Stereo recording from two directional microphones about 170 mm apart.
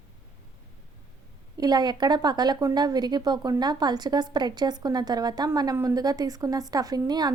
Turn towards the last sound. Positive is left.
turn(degrees=-25)  # may be behind; listen again after turning